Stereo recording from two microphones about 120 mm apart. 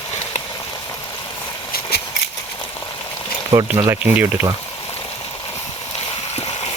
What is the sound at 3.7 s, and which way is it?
Speech, 25° right (ahead or behind).